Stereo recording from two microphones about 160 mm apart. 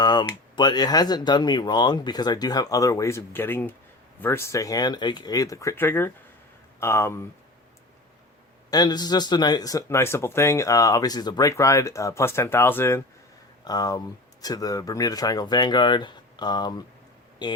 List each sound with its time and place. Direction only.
0.0 s speech: 25° left (ahead or behind)
8.7 s speech: 25° left (ahead or behind)
13.7 s speech: 25° left (ahead or behind)